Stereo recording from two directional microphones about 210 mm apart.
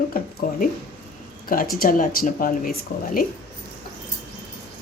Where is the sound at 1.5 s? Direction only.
45° left (ahead or behind).